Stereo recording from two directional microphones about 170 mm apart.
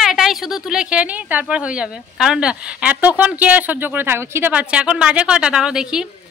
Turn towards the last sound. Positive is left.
turn(degrees=-5)  # may be behind; listen again after turning